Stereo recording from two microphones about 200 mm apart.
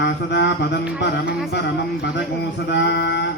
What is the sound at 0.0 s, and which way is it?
Speech, 60° left (ahead or behind).